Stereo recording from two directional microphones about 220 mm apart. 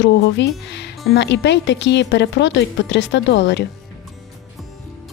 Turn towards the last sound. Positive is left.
turn(degrees=55)  # may be behind; listen again after turning